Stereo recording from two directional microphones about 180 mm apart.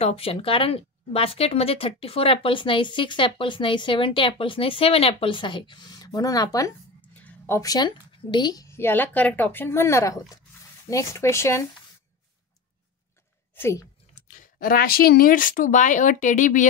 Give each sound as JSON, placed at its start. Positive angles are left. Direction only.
{"t": 0.0, "sound": "speech", "side_deg": 35}
{"t": 7.0, "sound": "a woman's voice", "side_deg": 10}
{"t": 13.6, "sound": "speech", "side_deg": 15}
{"t": 14.1, "sound": "speech", "side_deg": 45}